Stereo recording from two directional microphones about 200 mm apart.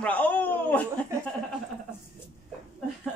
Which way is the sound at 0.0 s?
5° left (ahead or behind).